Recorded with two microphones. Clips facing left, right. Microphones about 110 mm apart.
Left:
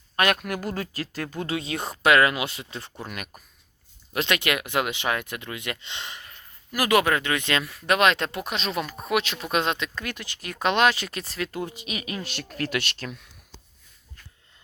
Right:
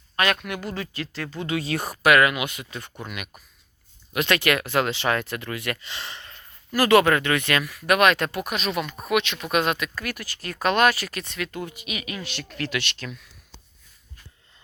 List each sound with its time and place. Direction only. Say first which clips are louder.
0.3 s speech: left 1 dB; 5° left (ahead or behind)
0.5 s speech: left 1 dB; 45° left (ahead or behind)
1.5 s speech: right 2 dB; 20° left (ahead or behind)
3.0 s speech: even; 40° left (ahead or behind)
4.3 s speech: right 4 dB; 20° left (ahead or behind); by 13.1 s 45° left (ahead or behind)